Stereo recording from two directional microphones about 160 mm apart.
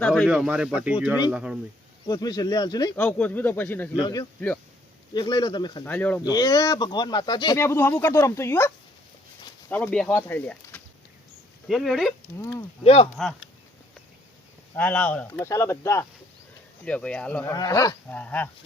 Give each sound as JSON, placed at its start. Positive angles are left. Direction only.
{"t": 0.1, "sound": "speech", "side_deg": -5}
{"t": 2.0, "sound": "speech", "side_deg": 25}
{"t": 2.9, "sound": "speech", "side_deg": 10}
{"t": 3.9, "sound": "speech", "side_deg": 25}
{"t": 5.8, "sound": "speech", "side_deg": 10}
{"t": 6.3, "sound": "speech", "side_deg": 25}
{"t": 7.6, "sound": "speech", "side_deg": 15}
{"t": 11.7, "sound": "speech", "side_deg": 0}
{"t": 12.8, "sound": "speech", "side_deg": 35}
{"t": 14.8, "sound": "speech", "side_deg": 10}
{"t": 16.8, "sound": "speech", "side_deg": 5}
{"t": 17.4, "sound": "speech", "side_deg": 20}
{"t": 18.1, "sound": "speech", "side_deg": 10}